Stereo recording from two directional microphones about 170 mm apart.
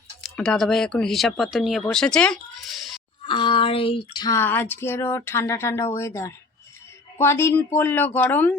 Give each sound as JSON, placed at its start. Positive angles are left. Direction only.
{"t": 0.2, "sound": "speech", "side_deg": 5}
{"t": 3.2, "sound": "a sound", "side_deg": 30}
{"t": 4.4, "sound": "speech", "side_deg": 10}